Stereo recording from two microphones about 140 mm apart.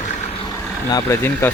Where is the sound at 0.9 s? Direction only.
20° left (ahead or behind).